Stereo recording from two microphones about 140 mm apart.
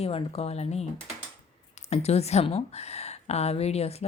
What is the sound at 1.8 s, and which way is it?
Speech, 50° left (ahead or behind).